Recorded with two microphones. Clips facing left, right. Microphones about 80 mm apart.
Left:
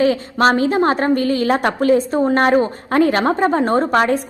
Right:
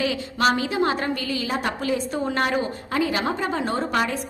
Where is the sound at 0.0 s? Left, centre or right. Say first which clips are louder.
Left 7 dB; left.